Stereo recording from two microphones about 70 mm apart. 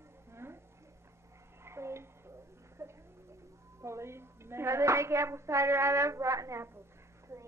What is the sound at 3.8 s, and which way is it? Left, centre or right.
A woman's voice, right.